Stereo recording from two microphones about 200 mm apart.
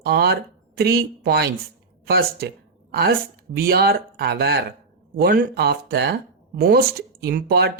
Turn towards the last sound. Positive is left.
turn(degrees=-50)  # may be behind; listen again after turning